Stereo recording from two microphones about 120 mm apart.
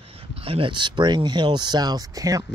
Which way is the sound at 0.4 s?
50° right (ahead or behind).